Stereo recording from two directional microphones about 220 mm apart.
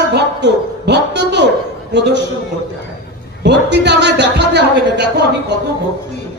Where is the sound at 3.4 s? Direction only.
50° right (ahead or behind).